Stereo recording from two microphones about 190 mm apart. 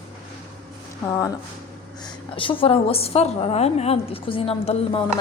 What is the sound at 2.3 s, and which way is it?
A woman's voice, 25° left (ahead or behind).